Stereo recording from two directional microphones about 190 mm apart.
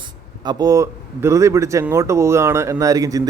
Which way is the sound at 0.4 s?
20° right (ahead or behind).